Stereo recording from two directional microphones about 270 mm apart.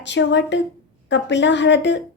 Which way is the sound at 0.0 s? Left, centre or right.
Left.